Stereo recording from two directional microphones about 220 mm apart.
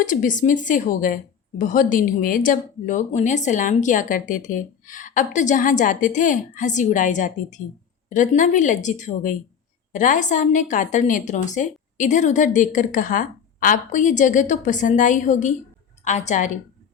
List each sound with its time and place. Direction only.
0.0 s a woman's voice: 35° left (ahead or behind)